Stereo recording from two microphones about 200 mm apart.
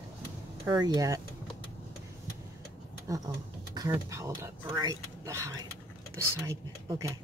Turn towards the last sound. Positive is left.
turn(degrees=-15)  # may be behind; listen again after turning